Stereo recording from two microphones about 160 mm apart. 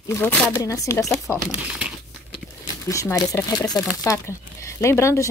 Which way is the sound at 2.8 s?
20° left (ahead or behind).